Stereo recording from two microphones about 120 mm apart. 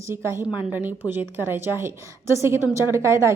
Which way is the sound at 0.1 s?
20° right (ahead or behind).